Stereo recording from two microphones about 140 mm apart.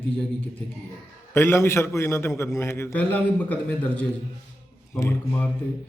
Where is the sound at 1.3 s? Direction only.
15° left (ahead or behind).